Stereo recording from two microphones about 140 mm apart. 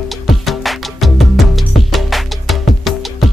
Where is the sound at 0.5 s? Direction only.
Centre (ahead or behind).